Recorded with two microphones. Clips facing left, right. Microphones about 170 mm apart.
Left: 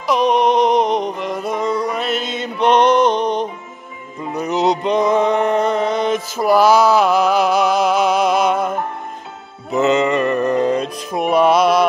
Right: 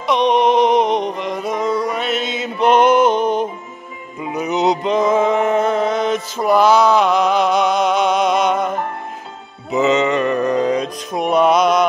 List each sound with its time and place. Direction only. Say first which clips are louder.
0.0 s music: even; centre (ahead or behind)